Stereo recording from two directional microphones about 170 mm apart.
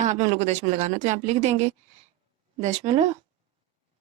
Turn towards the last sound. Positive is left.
turn(degrees=-40)  # may be behind; listen again after turning